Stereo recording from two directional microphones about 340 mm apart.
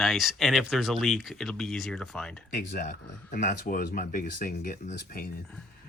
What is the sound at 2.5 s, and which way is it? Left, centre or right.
Speech, left.